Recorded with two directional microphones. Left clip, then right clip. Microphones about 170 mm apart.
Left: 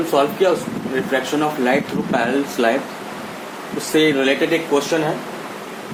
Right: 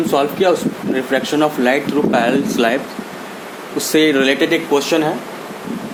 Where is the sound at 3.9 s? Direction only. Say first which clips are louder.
Right 2 dB; 65° right (ahead or behind).